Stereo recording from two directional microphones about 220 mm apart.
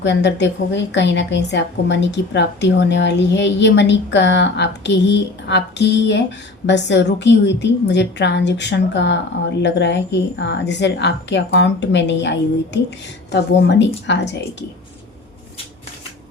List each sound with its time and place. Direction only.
0.0 s a woman's voice: 55° left (ahead or behind)